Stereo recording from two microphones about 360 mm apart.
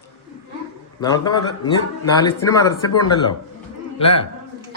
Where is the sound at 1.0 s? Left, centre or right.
Centre.